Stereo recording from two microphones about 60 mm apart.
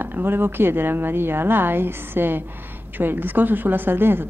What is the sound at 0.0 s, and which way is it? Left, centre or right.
A woman's voice, right.